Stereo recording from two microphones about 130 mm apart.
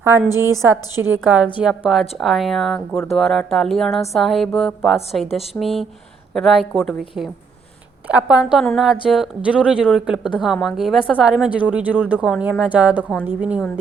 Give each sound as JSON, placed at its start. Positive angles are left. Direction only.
{"t": 0.6, "sound": "speech", "side_deg": -20}